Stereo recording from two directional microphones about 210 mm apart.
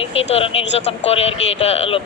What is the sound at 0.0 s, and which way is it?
Speech, 30° left (ahead or behind).